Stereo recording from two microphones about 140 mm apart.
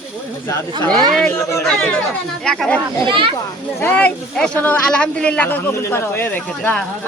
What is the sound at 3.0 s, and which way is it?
Speech, 40° right (ahead or behind).